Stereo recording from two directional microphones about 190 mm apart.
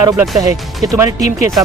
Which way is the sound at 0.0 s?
15° right (ahead or behind).